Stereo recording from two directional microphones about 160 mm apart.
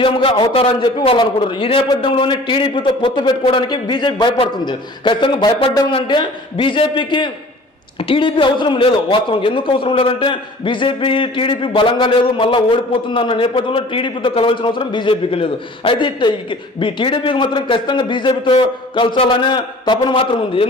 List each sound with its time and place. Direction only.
0.0 s a man's voice: 30° left (ahead or behind)